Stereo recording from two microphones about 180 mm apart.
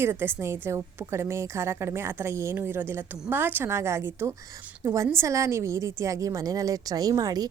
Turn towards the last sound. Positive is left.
turn(degrees=-20)  # may be behind; listen again after turning